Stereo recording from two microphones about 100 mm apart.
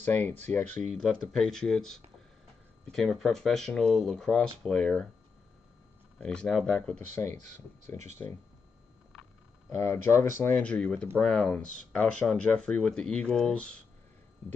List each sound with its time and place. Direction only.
0.0 s speech: 15° left (ahead or behind)
6.1 s speech: 10° left (ahead or behind)
7.2 s speech: 20° left (ahead or behind)
9.7 s speech: 25° left (ahead or behind)
10.6 s speech: 10° left (ahead or behind)